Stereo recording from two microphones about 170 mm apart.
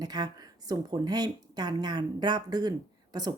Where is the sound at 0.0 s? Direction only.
25° right (ahead or behind).